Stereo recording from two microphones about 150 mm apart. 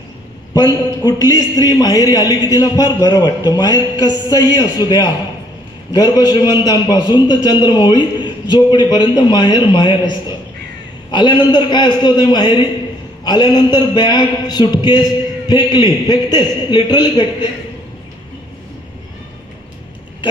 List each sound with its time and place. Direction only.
0.5 s a man's voice: 25° left (ahead or behind)